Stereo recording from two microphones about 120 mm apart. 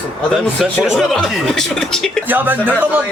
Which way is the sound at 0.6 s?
5° right (ahead or behind).